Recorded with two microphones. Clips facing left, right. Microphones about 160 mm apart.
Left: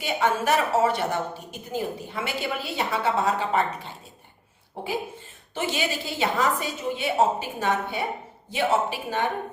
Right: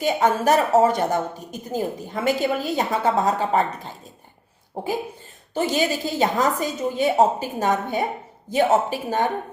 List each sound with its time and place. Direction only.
0.0 s speech: 40° right (ahead or behind)